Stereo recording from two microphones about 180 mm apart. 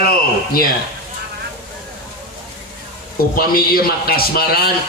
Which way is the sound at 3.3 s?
55° left (ahead or behind).